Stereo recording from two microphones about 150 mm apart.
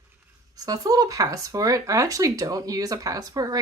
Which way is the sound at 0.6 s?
25° right (ahead or behind).